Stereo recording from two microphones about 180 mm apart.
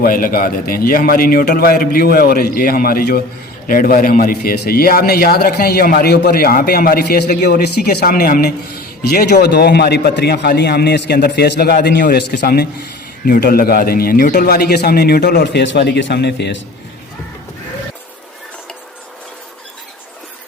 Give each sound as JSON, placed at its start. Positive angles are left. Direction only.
{"t": 0.0, "sound": "a man's voice", "side_deg": 55}